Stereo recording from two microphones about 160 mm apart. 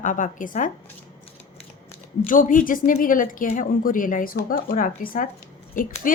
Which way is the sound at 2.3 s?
55° left (ahead or behind).